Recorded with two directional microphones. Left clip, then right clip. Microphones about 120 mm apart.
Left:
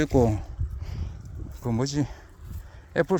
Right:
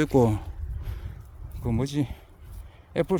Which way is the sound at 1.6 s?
Centre (ahead or behind).